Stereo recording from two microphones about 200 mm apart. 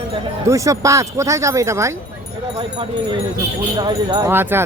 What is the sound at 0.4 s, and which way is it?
Speech, 15° right (ahead or behind).